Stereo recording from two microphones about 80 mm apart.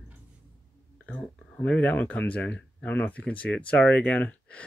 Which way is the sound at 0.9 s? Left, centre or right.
Centre.